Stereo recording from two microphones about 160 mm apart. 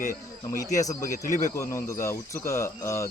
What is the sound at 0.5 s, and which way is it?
Speech, 20° left (ahead or behind).